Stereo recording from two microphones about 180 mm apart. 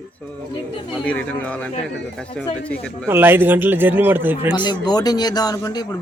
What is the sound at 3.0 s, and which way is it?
A man's voice, 10° right (ahead or behind).